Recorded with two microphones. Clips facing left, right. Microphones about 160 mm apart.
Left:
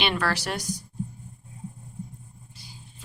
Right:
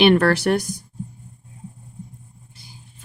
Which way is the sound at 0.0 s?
55° right (ahead or behind).